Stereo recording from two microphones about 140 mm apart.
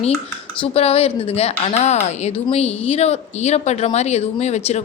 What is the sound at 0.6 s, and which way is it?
A woman's voice, 45° left (ahead or behind).